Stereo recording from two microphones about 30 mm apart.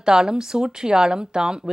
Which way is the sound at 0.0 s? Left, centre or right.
Centre.